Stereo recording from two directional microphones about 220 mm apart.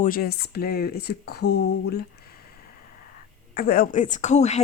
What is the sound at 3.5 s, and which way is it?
Speech, 40° left (ahead or behind).